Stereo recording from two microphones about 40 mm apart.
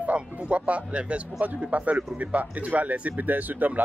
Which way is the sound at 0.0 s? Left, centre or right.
Right.